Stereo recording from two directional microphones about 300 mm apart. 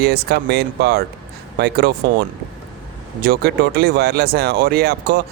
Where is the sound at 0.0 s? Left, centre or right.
Right.